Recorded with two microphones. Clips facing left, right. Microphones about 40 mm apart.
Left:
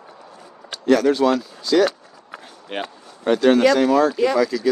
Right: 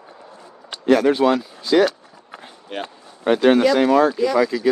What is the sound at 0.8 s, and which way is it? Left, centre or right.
Speech, right.